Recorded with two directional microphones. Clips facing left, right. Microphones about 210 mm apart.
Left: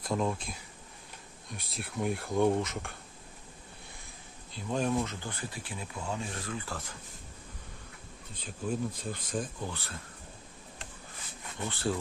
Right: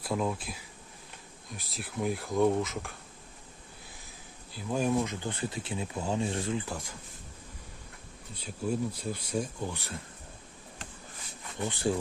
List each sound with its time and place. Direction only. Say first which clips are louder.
0.0 s speech: even; 5° right (ahead or behind)
4.5 s speech: right 2 dB; 5° right (ahead or behind)
8.4 s speech: right 2 dB; 10° right (ahead or behind)
11.7 s speech: right 2 dB; 15° right (ahead or behind)